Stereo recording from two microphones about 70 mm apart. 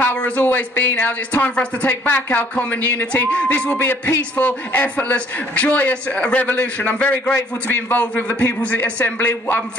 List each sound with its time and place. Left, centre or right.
0.0 s a man's voice: left
3.8 s music: left
4.2 s a man's voice: left